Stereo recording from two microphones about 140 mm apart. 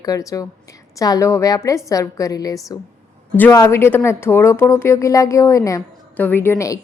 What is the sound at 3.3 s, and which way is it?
A woman's voice, 15° left (ahead or behind).